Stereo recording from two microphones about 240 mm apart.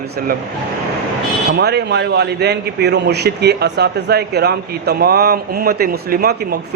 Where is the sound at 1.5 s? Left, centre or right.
Right.